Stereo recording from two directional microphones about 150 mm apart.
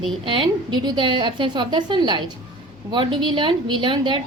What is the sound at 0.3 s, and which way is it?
A woman's voice, 30° right (ahead or behind).